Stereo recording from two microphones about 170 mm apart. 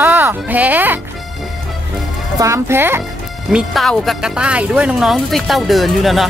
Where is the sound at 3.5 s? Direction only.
Centre (ahead or behind).